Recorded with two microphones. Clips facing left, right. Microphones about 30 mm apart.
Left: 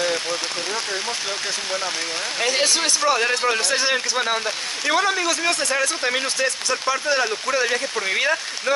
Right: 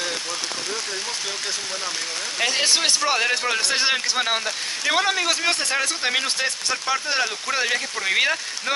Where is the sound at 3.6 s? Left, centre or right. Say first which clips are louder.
Left 1 dB; right.